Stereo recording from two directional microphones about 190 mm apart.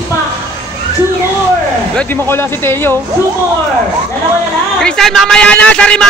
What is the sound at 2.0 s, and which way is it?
Speech, 10° left (ahead or behind).